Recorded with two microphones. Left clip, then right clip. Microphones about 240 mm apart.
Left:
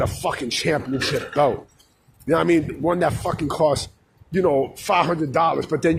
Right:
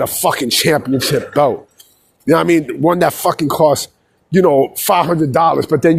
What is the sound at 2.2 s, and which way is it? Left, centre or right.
Speech, right.